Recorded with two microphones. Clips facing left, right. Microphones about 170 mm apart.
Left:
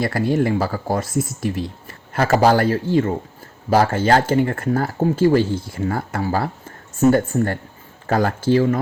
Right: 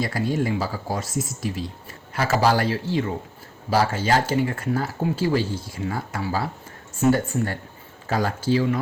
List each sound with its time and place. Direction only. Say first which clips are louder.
0.0 s speech: left 5 dB; 60° left (ahead or behind)